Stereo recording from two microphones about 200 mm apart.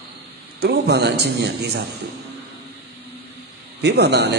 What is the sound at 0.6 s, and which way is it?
A man's voice, 55° right (ahead or behind).